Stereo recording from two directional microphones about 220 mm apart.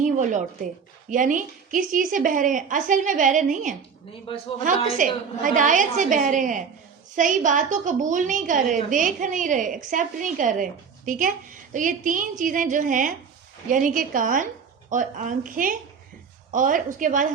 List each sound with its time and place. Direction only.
0.0 s a woman's voice: 35° right (ahead or behind)
4.3 s a woman's voice: 25° left (ahead or behind)
4.6 s a woman's voice: 35° right (ahead or behind)